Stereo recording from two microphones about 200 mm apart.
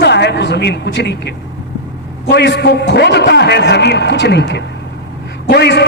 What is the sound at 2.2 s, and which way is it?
A man's voice, 60° left (ahead or behind).